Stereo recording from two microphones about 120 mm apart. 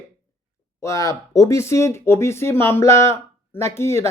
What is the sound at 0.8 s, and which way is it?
Speech, 25° left (ahead or behind).